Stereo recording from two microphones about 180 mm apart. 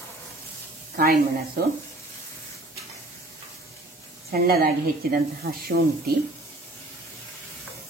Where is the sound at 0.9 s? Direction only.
55° right (ahead or behind).